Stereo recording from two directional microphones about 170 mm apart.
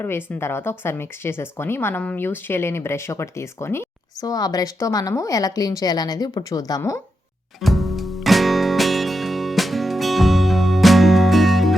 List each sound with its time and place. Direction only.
0.0 s speech: 15° left (ahead or behind)
7.6 s music: centre (ahead or behind)